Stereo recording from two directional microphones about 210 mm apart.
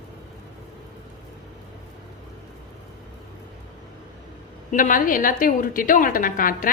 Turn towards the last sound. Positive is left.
turn(degrees=40)  # may be behind; listen again after turning